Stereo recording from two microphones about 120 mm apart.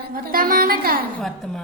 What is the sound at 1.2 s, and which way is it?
Speech, 5° left (ahead or behind).